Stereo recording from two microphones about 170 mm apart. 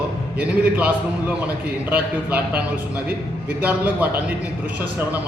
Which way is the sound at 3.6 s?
10° right (ahead or behind).